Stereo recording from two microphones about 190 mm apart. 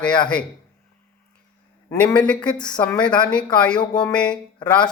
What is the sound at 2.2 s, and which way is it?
A man's voice, 5° left (ahead or behind).